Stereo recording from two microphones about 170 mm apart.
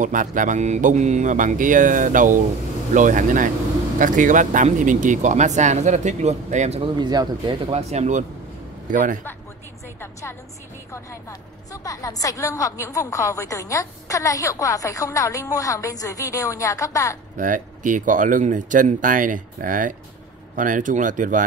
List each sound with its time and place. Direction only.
0.0 s speech: 50° right (ahead or behind)
7.0 s speech: 25° right (ahead or behind)
7.7 s speech: 40° right (ahead or behind)
10.9 s a woman's voice: 20° left (ahead or behind)
17.4 s speech: 50° right (ahead or behind)